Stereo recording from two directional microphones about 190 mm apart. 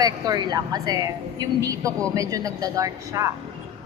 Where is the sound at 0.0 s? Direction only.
20° right (ahead or behind).